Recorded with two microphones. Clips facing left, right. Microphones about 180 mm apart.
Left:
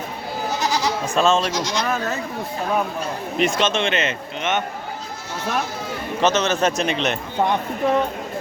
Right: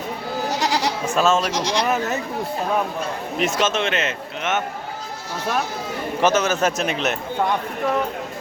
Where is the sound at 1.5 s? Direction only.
30° right (ahead or behind).